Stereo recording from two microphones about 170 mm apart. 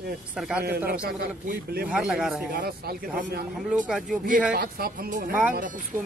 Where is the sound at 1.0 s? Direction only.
60° right (ahead or behind).